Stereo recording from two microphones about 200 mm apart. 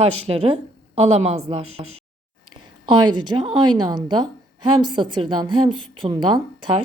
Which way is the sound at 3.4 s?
25° right (ahead or behind).